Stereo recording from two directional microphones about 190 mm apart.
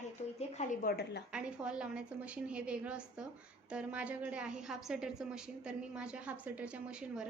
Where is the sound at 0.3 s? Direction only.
40° left (ahead or behind); by 1.2 s 55° left (ahead or behind).